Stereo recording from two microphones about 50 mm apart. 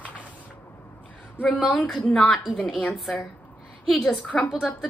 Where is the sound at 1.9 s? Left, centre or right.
Centre.